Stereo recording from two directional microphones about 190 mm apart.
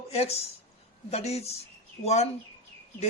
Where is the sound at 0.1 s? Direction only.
35° left (ahead or behind).